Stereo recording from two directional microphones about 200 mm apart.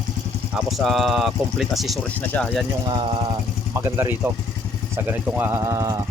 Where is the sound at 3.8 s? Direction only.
15° right (ahead or behind).